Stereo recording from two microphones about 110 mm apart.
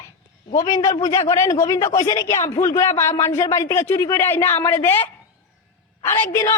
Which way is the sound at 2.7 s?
25° left (ahead or behind).